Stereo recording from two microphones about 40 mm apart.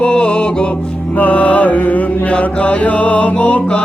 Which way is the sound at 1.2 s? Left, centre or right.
Left.